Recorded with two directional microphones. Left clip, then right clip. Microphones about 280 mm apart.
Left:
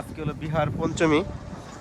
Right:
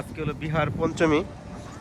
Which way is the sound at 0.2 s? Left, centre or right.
Centre.